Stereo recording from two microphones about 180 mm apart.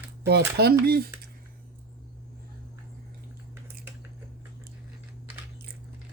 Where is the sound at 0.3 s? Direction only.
65° right (ahead or behind).